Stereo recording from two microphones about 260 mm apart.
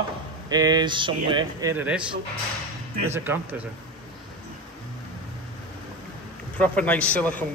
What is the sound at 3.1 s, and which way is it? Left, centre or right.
Speech, centre.